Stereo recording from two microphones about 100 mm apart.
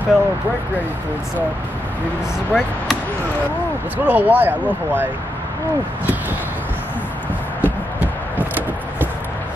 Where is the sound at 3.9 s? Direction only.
20° right (ahead or behind).